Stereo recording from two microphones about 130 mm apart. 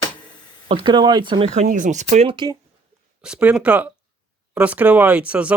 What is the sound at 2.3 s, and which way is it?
Speech, 35° right (ahead or behind).